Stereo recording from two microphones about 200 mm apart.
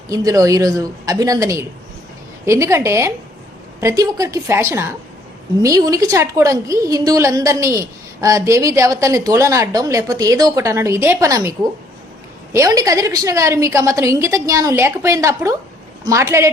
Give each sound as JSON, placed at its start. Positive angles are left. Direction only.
{"t": 0.1, "sound": "a woman's voice", "side_deg": -15}
{"t": 12.5, "sound": "a woman's voice", "side_deg": -15}